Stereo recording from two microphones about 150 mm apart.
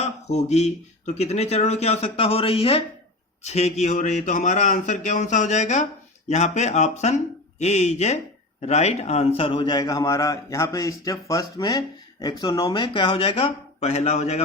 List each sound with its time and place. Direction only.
0.0 s a man's voice: 50° left (ahead or behind)